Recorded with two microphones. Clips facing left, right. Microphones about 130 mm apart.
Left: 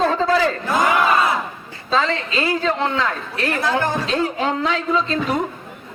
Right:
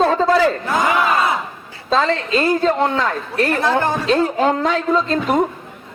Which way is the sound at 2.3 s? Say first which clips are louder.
Right 5 dB; 45° right (ahead or behind).